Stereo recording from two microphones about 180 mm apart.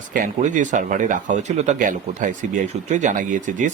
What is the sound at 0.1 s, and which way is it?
Speech, 45° right (ahead or behind).